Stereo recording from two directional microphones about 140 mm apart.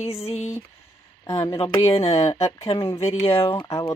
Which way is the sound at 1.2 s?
25° left (ahead or behind).